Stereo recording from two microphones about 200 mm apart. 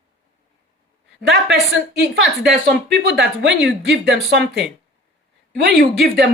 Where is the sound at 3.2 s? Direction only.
55° right (ahead or behind).